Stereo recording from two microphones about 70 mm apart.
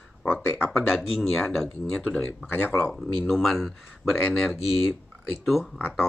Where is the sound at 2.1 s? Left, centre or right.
Left.